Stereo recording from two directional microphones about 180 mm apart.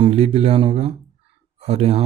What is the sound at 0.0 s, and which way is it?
Speech, 35° right (ahead or behind).